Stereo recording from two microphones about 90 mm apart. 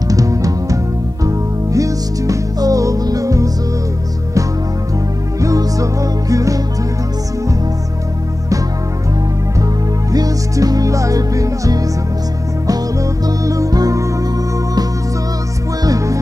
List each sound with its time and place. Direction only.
0.1 s music: 40° right (ahead or behind)
5.4 s music: 40° right (ahead or behind)
10.1 s music: 45° right (ahead or behind)
13.4 s music: 40° right (ahead or behind)
15.8 s music: 40° right (ahead or behind)